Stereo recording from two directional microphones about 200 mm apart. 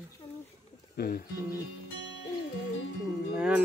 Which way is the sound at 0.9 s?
50° left (ahead or behind).